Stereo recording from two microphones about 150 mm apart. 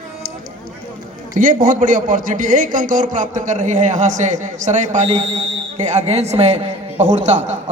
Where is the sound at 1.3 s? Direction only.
65° right (ahead or behind).